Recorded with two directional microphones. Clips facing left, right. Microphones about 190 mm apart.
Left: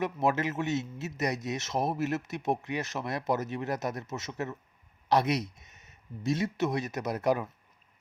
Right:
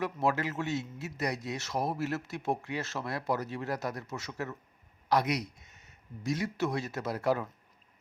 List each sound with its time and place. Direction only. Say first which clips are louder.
0.0 s a man's voice: left 2 dB; 20° left (ahead or behind)